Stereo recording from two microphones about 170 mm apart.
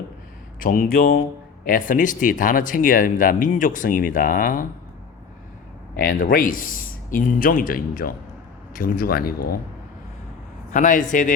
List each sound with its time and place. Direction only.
0.6 s a man's voice: 55° left (ahead or behind)
6.0 s a man's voice: 55° left (ahead or behind)
10.7 s speech: 50° left (ahead or behind)